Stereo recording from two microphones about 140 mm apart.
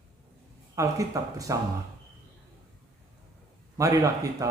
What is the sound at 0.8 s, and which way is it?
Speech, 25° right (ahead or behind).